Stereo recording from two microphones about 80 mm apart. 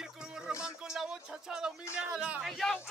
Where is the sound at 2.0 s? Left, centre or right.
Centre.